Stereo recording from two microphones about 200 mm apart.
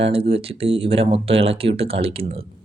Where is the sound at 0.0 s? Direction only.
30° right (ahead or behind).